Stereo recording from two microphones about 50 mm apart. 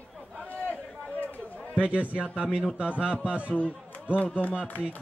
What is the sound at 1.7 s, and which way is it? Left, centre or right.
Speech, right.